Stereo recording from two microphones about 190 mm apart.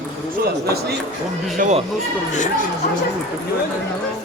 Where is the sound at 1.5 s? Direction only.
40° right (ahead or behind).